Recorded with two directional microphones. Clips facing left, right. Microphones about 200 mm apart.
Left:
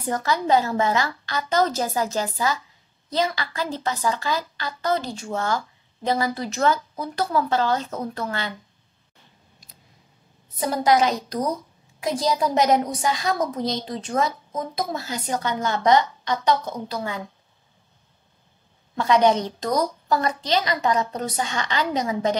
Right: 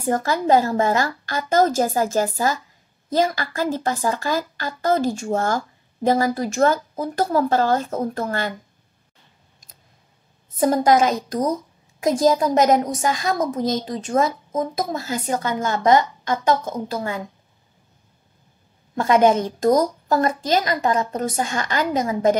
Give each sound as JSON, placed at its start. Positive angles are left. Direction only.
{"t": 0.0, "sound": "a woman's voice", "side_deg": -45}
{"t": 10.6, "sound": "a woman's voice", "side_deg": -45}
{"t": 18.9, "sound": "a woman's voice", "side_deg": -50}